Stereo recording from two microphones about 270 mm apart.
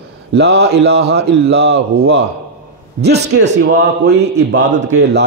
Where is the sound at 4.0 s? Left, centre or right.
Right.